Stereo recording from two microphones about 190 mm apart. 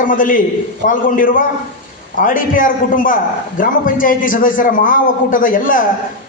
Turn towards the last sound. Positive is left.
turn(degrees=45)  # may be behind; listen again after turning